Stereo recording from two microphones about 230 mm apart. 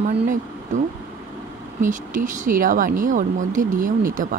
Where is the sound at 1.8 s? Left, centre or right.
Right.